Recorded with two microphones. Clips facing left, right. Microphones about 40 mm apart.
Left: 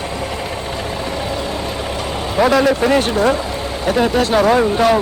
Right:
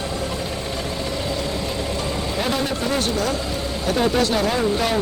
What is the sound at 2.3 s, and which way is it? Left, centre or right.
Speech, left.